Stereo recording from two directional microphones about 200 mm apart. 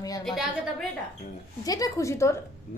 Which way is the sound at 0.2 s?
Centre (ahead or behind).